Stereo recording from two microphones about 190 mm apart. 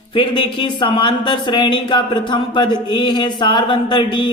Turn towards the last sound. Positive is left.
turn(degrees=25)  # may be behind; listen again after turning